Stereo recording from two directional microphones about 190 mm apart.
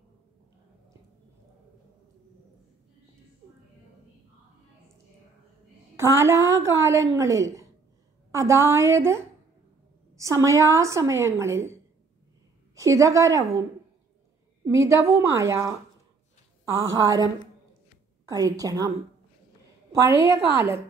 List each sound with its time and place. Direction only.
5.9 s a woman's voice: 15° right (ahead or behind)